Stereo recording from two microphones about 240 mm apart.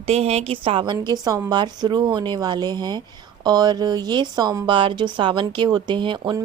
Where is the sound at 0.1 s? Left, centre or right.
Right.